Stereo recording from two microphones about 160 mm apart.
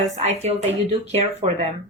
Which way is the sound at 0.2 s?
40° right (ahead or behind).